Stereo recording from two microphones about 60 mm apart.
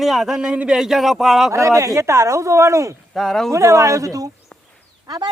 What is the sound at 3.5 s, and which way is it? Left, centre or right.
Speech, right.